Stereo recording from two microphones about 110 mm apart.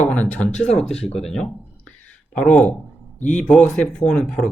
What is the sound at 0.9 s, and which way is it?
Speech, 70° left (ahead or behind).